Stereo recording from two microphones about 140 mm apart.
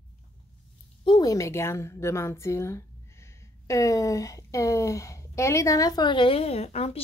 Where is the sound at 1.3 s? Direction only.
20° left (ahead or behind).